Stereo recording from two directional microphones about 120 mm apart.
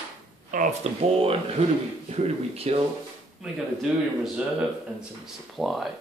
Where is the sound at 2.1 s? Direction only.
55° right (ahead or behind).